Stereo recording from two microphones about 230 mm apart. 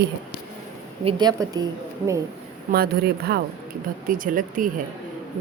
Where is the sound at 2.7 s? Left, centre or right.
Right.